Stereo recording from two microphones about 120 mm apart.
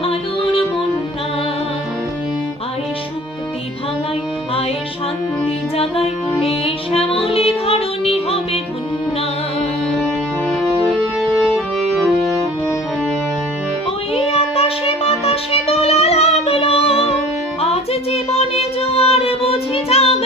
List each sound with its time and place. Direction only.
0.0 s music: 55° left (ahead or behind)
5.7 s music: 55° left (ahead or behind)
10.8 s music: centre (ahead or behind)
14.1 s music: 55° left (ahead or behind)
18.1 s child singing: 55° left (ahead or behind)